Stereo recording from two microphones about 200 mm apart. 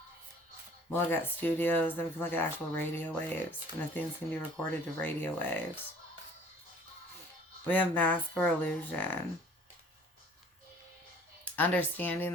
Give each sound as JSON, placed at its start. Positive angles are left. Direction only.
{"t": 0.9, "sound": "speech", "side_deg": 10}
{"t": 7.7, "sound": "speech", "side_deg": 10}
{"t": 11.5, "sound": "speech", "side_deg": 10}